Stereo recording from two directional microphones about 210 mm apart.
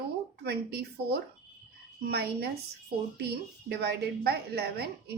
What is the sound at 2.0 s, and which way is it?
Speech, 50° right (ahead or behind).